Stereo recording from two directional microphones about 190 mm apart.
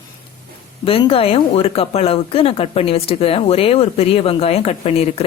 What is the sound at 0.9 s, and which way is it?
A woman's voice, 30° left (ahead or behind).